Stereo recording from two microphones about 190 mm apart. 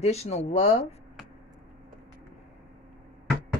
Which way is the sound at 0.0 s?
35° left (ahead or behind).